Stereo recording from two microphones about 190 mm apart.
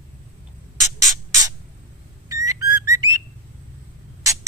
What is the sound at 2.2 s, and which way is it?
Whistle, 15° right (ahead or behind).